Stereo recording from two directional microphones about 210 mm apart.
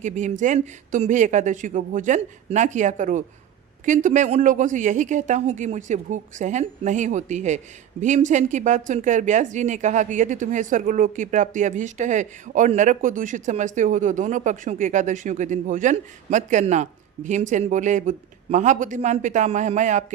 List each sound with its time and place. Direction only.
0.0 s speech: 35° right (ahead or behind)